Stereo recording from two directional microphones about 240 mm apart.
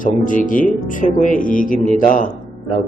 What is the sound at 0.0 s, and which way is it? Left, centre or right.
Speech, left.